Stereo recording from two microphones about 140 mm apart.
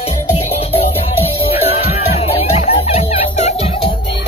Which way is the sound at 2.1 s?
45° left (ahead or behind).